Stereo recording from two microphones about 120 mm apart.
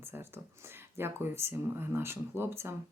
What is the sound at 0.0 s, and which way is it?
Speech, 20° right (ahead or behind).